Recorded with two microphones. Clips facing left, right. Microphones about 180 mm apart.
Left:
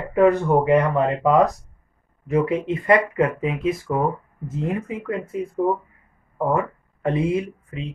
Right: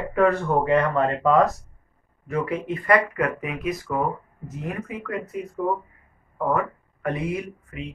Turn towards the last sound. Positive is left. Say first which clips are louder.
# left 3 dB
turn(degrees=30)  # may be behind; listen again after turning